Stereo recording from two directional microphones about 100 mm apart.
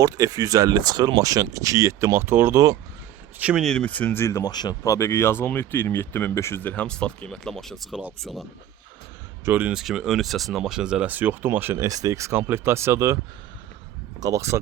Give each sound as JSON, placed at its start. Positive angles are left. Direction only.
{"t": 0.0, "sound": "speech", "side_deg": -35}
{"t": 3.3, "sound": "speech", "side_deg": -15}
{"t": 3.6, "sound": "speech", "side_deg": 10}
{"t": 4.5, "sound": "speech", "side_deg": 40}
{"t": 9.4, "sound": "speech", "side_deg": -20}
{"t": 9.7, "sound": "speech", "side_deg": -5}
{"t": 11.8, "sound": "speech", "side_deg": -35}
{"t": 14.2, "sound": "speech", "side_deg": -35}